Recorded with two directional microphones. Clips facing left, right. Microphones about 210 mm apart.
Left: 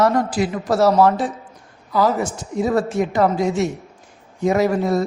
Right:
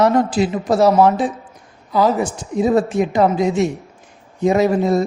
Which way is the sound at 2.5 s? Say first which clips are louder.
Right 3 dB; 20° right (ahead or behind).